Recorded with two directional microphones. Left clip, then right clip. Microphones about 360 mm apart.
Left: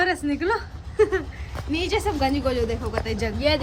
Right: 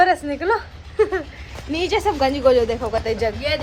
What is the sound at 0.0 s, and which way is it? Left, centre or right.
Speech, centre.